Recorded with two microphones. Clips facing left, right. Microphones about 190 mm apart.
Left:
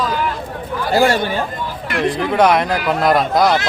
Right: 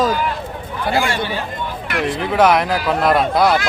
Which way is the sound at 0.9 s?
40° left (ahead or behind).